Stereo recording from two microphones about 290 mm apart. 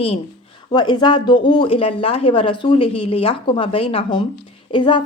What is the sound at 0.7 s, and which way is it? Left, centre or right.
Speech, centre.